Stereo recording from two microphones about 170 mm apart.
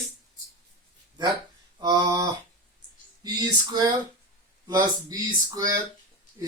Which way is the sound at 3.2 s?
25° right (ahead or behind).